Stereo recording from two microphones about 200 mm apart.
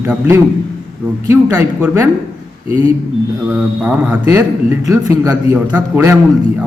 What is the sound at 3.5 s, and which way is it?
A man's voice, 5° right (ahead or behind).